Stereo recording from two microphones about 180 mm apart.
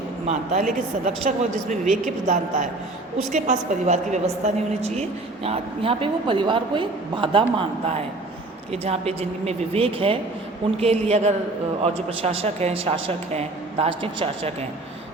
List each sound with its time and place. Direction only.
0.3 s a woman's voice: 40° right (ahead or behind)